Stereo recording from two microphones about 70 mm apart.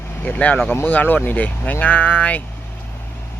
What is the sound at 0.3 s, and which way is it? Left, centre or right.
Speech, centre.